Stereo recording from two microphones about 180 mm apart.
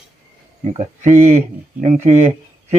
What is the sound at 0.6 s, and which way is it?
Speech, 40° right (ahead or behind).